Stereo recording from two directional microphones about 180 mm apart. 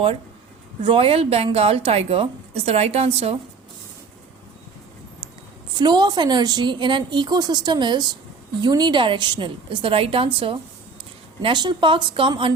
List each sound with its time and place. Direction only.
0.9 s a woman's voice: 30° right (ahead or behind)
5.7 s a woman's voice: 25° right (ahead or behind)